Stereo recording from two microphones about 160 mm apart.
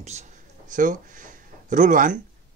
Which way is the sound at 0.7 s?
55° right (ahead or behind).